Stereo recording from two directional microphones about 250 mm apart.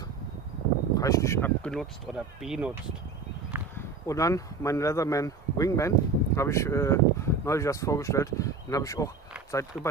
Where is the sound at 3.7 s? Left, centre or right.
Centre.